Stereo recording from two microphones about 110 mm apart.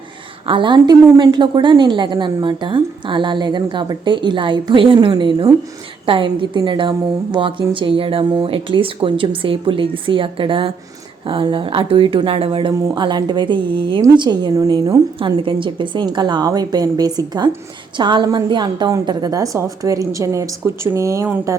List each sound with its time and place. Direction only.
0.4 s a woman's voice: 50° right (ahead or behind)
12.9 s a woman's voice: 40° right (ahead or behind)
15.4 s a woman's voice: 50° right (ahead or behind); by 21.6 s 30° right (ahead or behind)